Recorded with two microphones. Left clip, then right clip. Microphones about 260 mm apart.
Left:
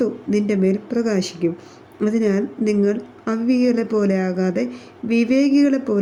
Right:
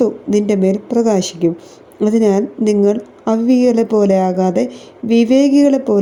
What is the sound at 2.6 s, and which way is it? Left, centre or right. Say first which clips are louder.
Speech: right 6 dB; right.